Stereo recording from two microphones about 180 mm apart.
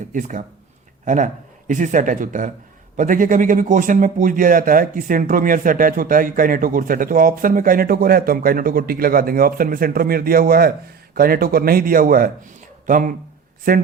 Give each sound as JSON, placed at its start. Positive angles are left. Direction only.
{"t": 0.1, "sound": "a man's voice", "side_deg": -45}